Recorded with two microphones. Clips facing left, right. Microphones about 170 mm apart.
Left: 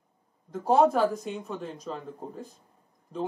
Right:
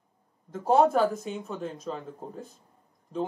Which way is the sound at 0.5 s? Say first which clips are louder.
Even; centre (ahead or behind).